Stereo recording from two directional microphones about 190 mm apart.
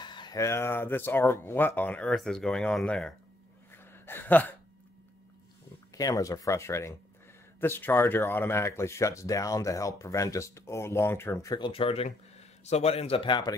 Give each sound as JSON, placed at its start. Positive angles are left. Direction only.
{"t": 0.0, "sound": "speech", "side_deg": 25}
{"t": 3.7, "sound": "gasp", "side_deg": 10}
{"t": 5.9, "sound": "speech", "side_deg": 20}